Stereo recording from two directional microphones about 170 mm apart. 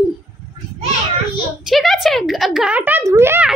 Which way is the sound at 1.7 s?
Centre (ahead or behind).